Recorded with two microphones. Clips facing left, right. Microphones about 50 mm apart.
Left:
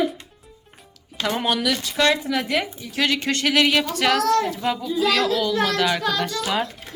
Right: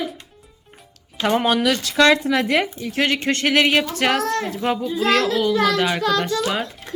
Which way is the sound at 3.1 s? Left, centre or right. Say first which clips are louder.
Right 1 dB; right.